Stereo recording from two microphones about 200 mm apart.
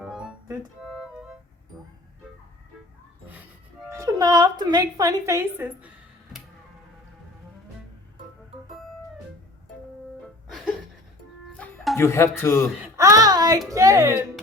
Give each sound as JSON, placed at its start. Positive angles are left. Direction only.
{"t": 0.0, "sound": "organ", "side_deg": -5}
{"t": 0.8, "sound": "music", "side_deg": 0}
{"t": 3.2, "sound": "a sound", "side_deg": -10}
{"t": 11.5, "sound": "music", "side_deg": 5}
{"t": 12.4, "sound": "a man's voice", "side_deg": 10}
{"t": 13.0, "sound": "a sound", "side_deg": -15}
{"t": 13.7, "sound": "speech", "side_deg": -15}